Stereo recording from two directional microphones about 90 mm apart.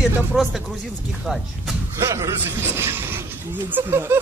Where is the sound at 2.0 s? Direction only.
35° right (ahead or behind).